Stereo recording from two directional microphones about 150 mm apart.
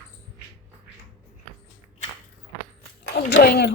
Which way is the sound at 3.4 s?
90° left.